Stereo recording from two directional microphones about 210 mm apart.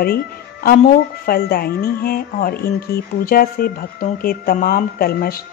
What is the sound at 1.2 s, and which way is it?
Speech, 45° left (ahead or behind).